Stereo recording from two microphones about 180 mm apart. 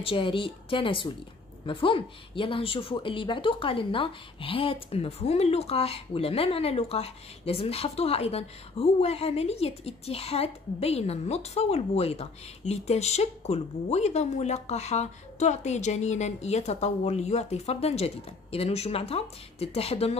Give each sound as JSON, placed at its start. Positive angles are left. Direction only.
{"t": 0.0, "sound": "speech", "side_deg": 30}